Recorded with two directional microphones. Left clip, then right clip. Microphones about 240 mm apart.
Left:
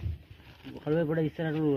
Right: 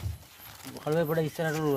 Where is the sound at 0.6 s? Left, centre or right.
Right.